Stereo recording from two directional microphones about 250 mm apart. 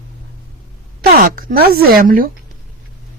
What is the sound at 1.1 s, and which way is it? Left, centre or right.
Speech, right.